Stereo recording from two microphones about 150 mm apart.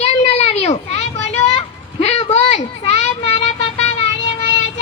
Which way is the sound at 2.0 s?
45° left (ahead or behind).